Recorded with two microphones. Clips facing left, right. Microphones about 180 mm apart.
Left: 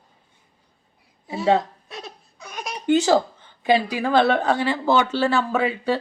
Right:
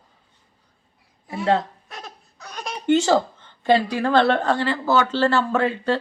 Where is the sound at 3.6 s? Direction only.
10° left (ahead or behind).